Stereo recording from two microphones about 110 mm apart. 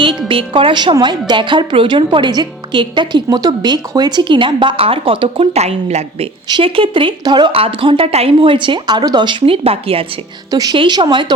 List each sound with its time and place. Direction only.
0.3 s a woman's voice: 55° right (ahead or behind)
5.5 s a woman's voice: 75° right (ahead or behind)
6.5 s a woman's voice: 50° right (ahead or behind)
7.5 s a woman's voice: 55° right (ahead or behind)
10.5 s a woman's voice: 35° right (ahead or behind)